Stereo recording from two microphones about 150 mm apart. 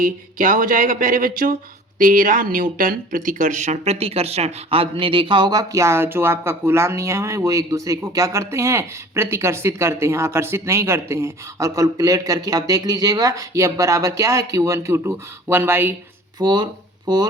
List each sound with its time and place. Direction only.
0.0 s speech: 65° right (ahead or behind); by 16.0 s 15° right (ahead or behind)
16.4 s speech: 30° right (ahead or behind)